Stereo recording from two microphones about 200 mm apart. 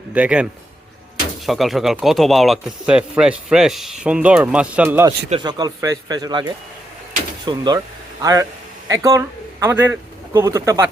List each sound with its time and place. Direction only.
0.1 s a man's voice: 5° right (ahead or behind)
1.5 s speech: centre (ahead or behind)
5.3 s speech: 20° right (ahead or behind)
7.4 s a man's voice: 20° right (ahead or behind)